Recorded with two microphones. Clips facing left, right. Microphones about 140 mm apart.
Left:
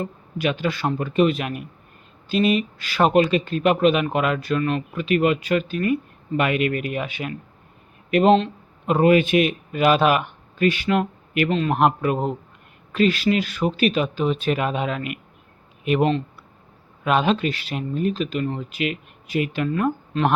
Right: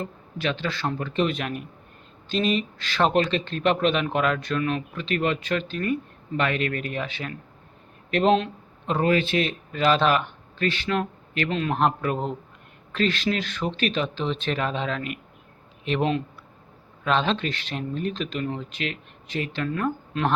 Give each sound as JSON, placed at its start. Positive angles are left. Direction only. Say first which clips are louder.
{"t": 0.0, "sound": "a man's voice", "louder": "left 4 dB", "side_deg": 10}
{"t": 8.9, "sound": "a man's voice", "louder": "left 6 dB", "side_deg": 15}